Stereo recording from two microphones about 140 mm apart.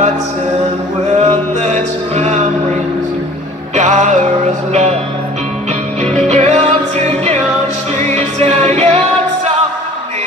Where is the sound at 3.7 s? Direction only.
60° right (ahead or behind).